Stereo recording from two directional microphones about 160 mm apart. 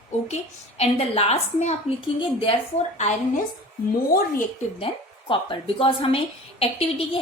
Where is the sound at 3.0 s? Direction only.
45° left (ahead or behind).